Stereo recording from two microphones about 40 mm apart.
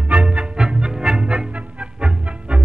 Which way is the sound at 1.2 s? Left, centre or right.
Right.